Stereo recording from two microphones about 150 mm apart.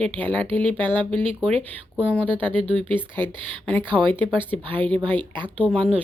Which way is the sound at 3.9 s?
35° right (ahead or behind).